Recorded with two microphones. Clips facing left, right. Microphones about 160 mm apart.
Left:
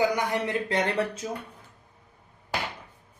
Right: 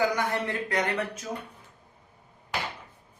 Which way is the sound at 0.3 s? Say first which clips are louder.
Left 2 dB; 20° left (ahead or behind).